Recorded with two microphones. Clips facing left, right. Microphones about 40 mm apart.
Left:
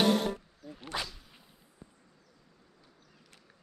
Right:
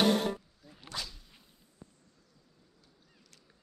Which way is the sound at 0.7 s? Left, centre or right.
Left.